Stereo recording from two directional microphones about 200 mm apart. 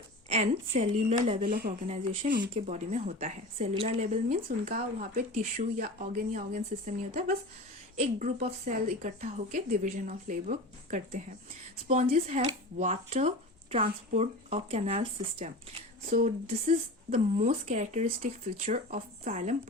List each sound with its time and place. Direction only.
0.3 s speech: 30° right (ahead or behind)
1.9 s speech: 35° right (ahead or behind)
16.0 s speech: 45° right (ahead or behind)
16.5 s speech: 35° right (ahead or behind)